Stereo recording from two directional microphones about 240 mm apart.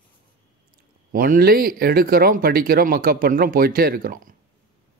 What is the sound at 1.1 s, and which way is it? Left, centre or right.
Speech, right.